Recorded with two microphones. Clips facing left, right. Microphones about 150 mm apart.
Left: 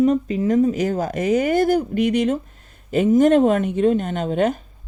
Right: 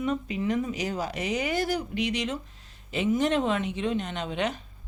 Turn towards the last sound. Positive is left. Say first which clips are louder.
# left 10 dB
turn(degrees=45)  # may be behind; listen again after turning